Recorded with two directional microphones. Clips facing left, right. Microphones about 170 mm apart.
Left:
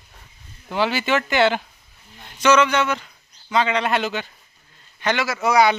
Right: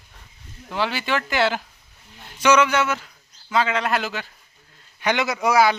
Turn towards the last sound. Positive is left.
turn(degrees=-5)  # may be behind; listen again after turning